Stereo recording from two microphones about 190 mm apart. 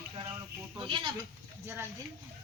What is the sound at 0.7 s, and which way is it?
Speech, 25° right (ahead or behind).